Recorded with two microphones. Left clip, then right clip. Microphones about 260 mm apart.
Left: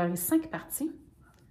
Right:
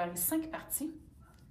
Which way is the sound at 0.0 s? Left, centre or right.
Left.